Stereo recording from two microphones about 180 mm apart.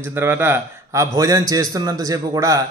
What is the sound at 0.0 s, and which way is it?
A man's voice, 15° right (ahead or behind).